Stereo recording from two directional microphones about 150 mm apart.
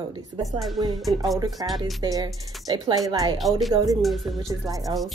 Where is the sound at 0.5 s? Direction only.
Centre (ahead or behind).